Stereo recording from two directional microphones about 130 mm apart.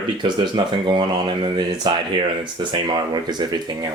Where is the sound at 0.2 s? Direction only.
40° right (ahead or behind).